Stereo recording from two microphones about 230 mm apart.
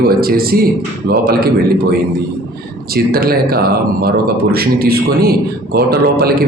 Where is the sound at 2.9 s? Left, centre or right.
Right.